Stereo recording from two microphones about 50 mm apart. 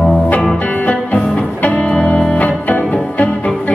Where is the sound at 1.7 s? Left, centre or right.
Left.